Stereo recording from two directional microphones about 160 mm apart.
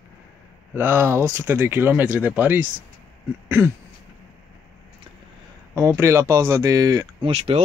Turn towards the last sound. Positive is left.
turn(degrees=-40)  # may be behind; listen again after turning